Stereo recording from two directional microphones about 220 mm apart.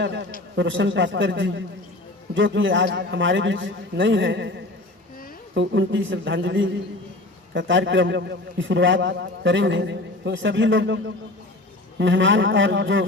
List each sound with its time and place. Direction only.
0.5 s a man's voice: 55° right (ahead or behind)